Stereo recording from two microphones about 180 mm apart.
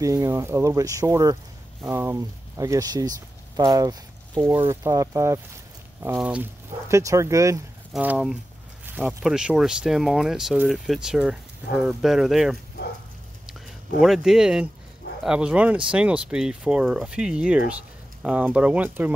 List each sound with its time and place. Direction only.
0.0 s speech: 15° right (ahead or behind)
7.9 s speech: 5° right (ahead or behind)
14.0 s speech: centre (ahead or behind)